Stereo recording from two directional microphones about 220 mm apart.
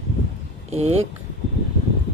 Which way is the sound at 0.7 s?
30° right (ahead or behind).